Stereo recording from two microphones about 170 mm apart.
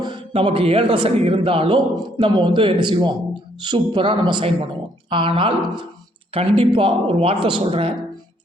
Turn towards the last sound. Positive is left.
turn(degrees=-35)  # may be behind; listen again after turning